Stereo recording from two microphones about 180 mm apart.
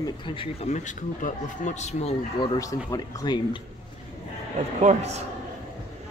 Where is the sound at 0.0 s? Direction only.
25° left (ahead or behind).